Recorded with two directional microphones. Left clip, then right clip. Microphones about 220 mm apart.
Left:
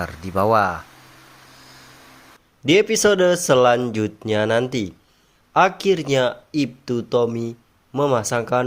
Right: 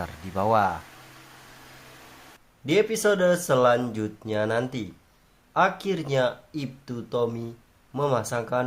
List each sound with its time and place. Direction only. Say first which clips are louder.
0.0 s speech: left 7 dB; 15° left (ahead or behind)
2.6 s speech: left 6 dB; 35° left (ahead or behind)